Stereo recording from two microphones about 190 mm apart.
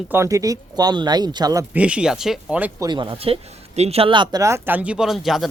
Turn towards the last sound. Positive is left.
turn(degrees=0)  # may be behind; listen again after turning